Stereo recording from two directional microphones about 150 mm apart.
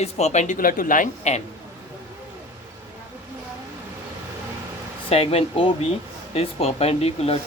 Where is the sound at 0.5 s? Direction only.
70° left (ahead or behind).